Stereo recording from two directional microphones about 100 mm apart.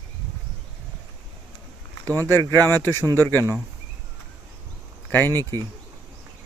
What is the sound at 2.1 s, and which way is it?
Speech, 20° left (ahead or behind).